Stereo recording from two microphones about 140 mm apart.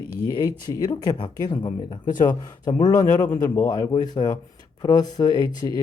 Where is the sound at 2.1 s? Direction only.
70° left (ahead or behind).